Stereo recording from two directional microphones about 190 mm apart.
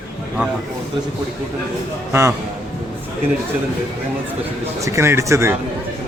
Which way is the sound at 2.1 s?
15° right (ahead or behind).